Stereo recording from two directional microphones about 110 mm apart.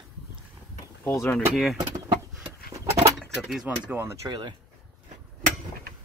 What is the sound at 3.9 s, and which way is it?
Speech, 20° right (ahead or behind).